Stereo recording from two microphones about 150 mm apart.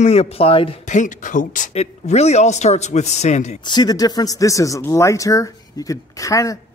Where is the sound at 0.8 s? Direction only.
55° left (ahead or behind).